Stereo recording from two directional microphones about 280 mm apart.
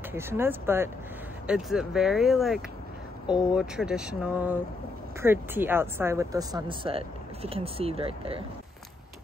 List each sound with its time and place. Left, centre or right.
0.1 s speech: centre